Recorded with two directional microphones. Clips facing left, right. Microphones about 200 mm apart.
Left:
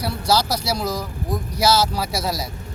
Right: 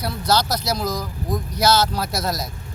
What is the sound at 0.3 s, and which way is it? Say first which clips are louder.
Speech: even; 10° left (ahead or behind).